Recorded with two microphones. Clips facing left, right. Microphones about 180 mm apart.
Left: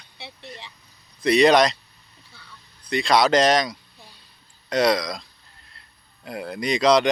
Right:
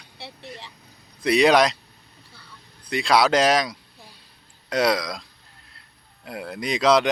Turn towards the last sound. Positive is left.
turn(degrees=-5)  # may be behind; listen again after turning